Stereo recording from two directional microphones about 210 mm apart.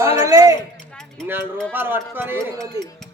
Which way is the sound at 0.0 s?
15° right (ahead or behind).